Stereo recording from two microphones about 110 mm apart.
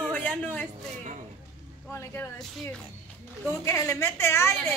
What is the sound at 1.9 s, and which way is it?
Speech, 25° left (ahead or behind).